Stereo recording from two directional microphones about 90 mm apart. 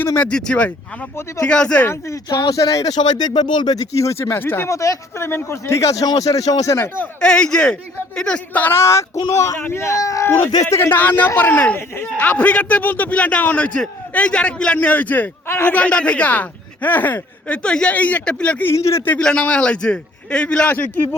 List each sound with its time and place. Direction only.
0.0 s speech: 25° left (ahead or behind)
0.3 s a man's voice: 10° left (ahead or behind)
1.9 s speech: 30° left (ahead or behind)
2.4 s speech: 40° left (ahead or behind)
6.7 s speech: 25° left (ahead or behind)
7.2 s a man's voice: 10° left (ahead or behind); by 15.7 s 25° left (ahead or behind)
15.7 s a man's voice: 15° left (ahead or behind)
18.6 s speech: 35° left (ahead or behind)
19.2 s a man's voice: 10° left (ahead or behind)